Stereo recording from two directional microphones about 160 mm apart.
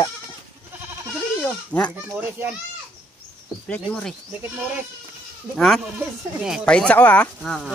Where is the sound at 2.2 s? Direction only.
10° right (ahead or behind).